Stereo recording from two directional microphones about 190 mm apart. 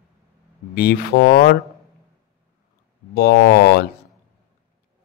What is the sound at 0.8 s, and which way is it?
Speech, 55° left (ahead or behind).